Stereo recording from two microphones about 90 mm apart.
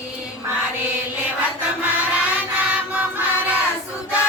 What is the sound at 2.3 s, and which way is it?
Music, 15° right (ahead or behind).